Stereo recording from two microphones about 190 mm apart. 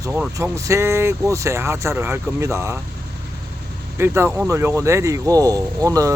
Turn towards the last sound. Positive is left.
turn(degrees=-15)  # may be behind; listen again after turning